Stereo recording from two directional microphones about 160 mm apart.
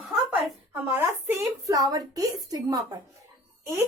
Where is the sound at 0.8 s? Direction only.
15° right (ahead or behind).